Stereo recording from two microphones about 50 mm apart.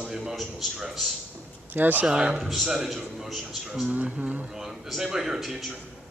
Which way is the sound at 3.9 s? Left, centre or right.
Right.